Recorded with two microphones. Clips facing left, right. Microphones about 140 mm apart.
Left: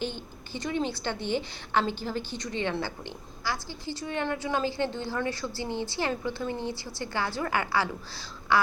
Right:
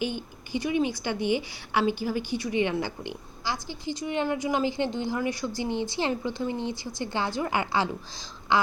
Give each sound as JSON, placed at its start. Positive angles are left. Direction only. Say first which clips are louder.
{"t": 0.0, "sound": "a woman's voice", "louder": "right 3 dB", "side_deg": -10}